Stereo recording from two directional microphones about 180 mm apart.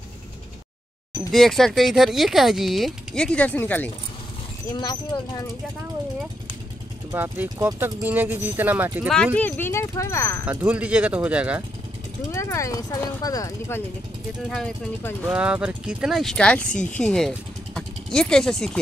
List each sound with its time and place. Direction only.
1.3 s speech: centre (ahead or behind)
4.7 s speech: 25° left (ahead or behind)
7.1 s speech: 15° right (ahead or behind)
9.1 s speech: 5° left (ahead or behind)
10.4 s speech: 10° right (ahead or behind)
12.4 s speech: 15° left (ahead or behind)
15.2 s speech: 5° right (ahead or behind)